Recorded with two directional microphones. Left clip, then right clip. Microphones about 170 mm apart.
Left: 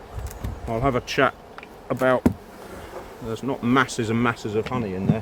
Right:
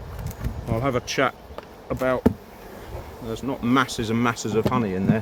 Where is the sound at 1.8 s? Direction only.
65° left (ahead or behind).